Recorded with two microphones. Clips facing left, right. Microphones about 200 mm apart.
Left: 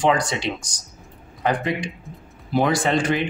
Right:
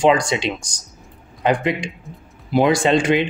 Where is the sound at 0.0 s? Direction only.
20° right (ahead or behind).